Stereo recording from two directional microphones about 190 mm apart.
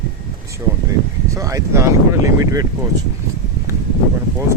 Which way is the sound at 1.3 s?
15° right (ahead or behind).